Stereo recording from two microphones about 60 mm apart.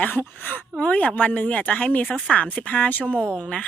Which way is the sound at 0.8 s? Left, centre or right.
Left.